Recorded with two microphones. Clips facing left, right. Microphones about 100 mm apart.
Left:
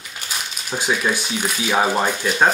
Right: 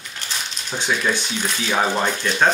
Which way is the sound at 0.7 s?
10° left (ahead or behind).